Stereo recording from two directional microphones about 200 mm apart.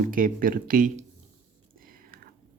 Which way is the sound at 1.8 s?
45° right (ahead or behind).